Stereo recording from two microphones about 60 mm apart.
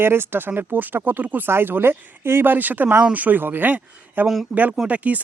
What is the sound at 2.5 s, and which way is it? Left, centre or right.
Speech, right.